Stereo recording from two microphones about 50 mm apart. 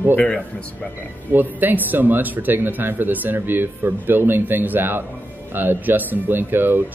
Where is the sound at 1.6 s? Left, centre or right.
Right.